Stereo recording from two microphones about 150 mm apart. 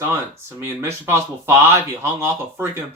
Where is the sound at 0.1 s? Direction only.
15° right (ahead or behind).